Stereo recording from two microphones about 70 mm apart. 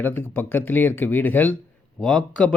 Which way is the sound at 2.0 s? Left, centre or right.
Centre.